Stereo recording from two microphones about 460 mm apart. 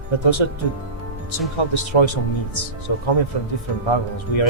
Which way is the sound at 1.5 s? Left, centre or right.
Left.